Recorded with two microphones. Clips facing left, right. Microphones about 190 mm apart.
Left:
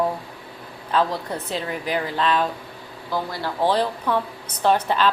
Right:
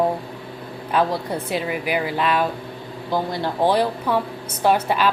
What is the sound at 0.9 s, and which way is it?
A woman's voice, 10° right (ahead or behind).